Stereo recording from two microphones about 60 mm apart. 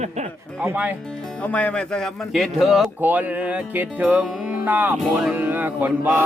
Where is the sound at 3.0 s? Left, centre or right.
Right.